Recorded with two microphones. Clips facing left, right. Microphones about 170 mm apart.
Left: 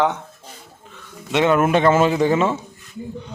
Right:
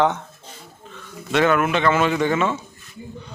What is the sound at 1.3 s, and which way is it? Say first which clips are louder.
Speech: left 1 dB; 25° left (ahead or behind).